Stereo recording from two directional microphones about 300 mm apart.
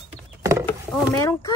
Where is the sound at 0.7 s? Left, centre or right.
Centre.